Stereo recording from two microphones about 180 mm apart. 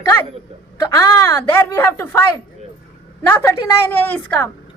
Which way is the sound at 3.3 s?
15° left (ahead or behind).